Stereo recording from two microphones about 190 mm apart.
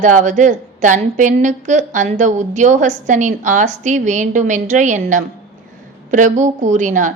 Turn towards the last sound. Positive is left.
turn(degrees=-40)  # may be behind; listen again after turning